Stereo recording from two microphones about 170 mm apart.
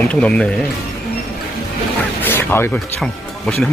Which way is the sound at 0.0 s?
5° left (ahead or behind).